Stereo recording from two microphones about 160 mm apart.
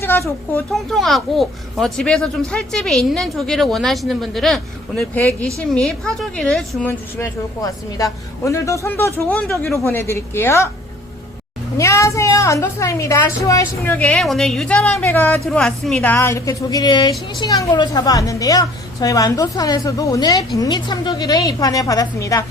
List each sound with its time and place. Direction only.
0.0 s speech: 15° left (ahead or behind)
0.7 s speech: centre (ahead or behind)
7.2 s a woman's voice: 20° left (ahead or behind)
11.8 s a woman's voice: 20° left (ahead or behind)